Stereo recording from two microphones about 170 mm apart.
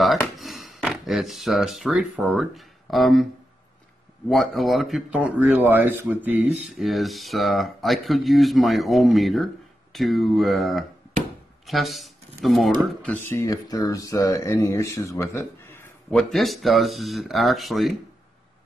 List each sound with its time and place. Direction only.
0.4 s a sound: centre (ahead or behind)
2.3 s speech: centre (ahead or behind)
4.3 s speech: centre (ahead or behind)
6.8 s speech: centre (ahead or behind)
13.0 s speech: 15° left (ahead or behind)
16.1 s speech: 5° left (ahead or behind)